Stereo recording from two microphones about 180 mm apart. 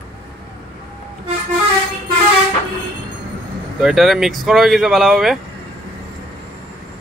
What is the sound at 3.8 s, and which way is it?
Speech, centre (ahead or behind).